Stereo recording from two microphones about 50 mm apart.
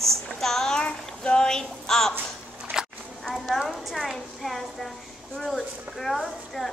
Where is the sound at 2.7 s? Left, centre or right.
Right.